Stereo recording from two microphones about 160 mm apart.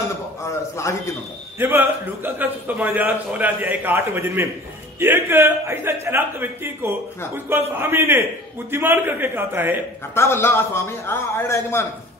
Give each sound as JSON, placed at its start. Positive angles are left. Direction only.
{"t": 0.5, "sound": "a man's voice", "side_deg": 20}
{"t": 1.6, "sound": "a man's voice", "side_deg": -15}
{"t": 10.1, "sound": "a man's voice", "side_deg": 15}